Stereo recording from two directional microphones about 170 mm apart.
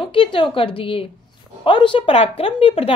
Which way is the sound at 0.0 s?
30° left (ahead or behind).